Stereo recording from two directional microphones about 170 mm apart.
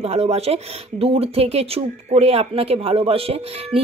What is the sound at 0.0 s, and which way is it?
Speech, 40° right (ahead or behind).